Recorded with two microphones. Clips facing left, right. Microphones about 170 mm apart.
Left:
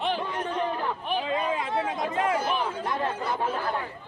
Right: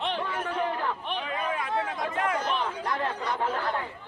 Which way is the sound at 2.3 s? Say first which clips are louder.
Left 2 dB; 5° left (ahead or behind).